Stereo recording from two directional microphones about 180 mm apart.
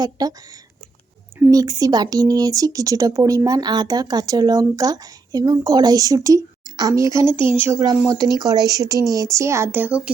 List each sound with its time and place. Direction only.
0.0 s speech: 20° right (ahead or behind)
1.4 s speech: 20° right (ahead or behind)